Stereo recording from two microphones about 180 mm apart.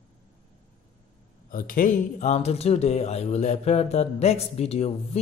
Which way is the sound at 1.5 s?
50° left (ahead or behind).